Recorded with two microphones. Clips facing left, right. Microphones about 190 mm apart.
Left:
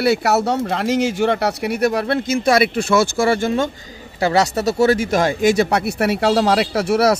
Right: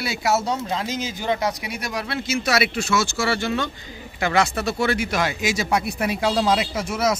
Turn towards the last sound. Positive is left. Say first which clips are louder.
# left 7 dB
turn(degrees=65)  # may be behind; listen again after turning